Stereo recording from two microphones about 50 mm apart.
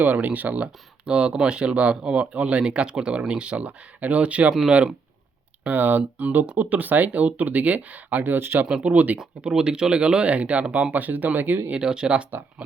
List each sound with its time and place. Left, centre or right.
0.0 s speech: right
1.0 s speech: centre
5.6 s speech: right
8.4 s speech: right
8.6 s speech: right
9.5 s speech: centre; by 11.7 s right
11.7 s speech: centre